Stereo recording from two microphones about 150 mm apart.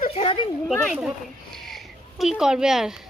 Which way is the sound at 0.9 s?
5° right (ahead or behind).